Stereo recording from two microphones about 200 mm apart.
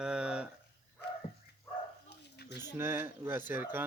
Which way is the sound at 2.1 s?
55° left (ahead or behind).